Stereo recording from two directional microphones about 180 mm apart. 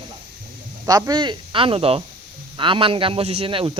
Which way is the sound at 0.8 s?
20° right (ahead or behind).